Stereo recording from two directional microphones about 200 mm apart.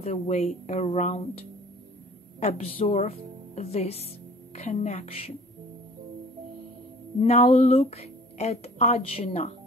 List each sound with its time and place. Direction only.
0.0 s speech: 35° left (ahead or behind)
2.4 s speech: 30° left (ahead or behind)
7.2 s speech: 30° left (ahead or behind)